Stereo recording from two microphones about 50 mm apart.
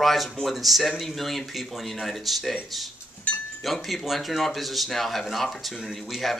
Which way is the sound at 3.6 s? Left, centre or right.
Centre.